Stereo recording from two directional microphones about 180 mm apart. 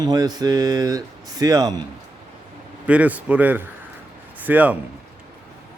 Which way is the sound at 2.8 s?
10° right (ahead or behind).